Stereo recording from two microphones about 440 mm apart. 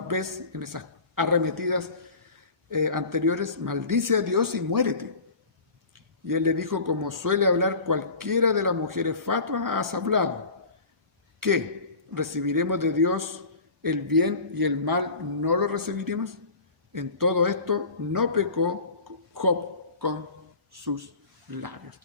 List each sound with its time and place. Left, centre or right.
0.1 s a man's voice: right
6.2 s a man's voice: right
11.3 s a man's voice: right
19.3 s a sound: right
20.7 s a man's voice: right